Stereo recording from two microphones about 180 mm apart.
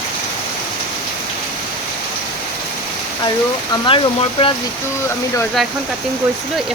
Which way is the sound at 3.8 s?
30° left (ahead or behind).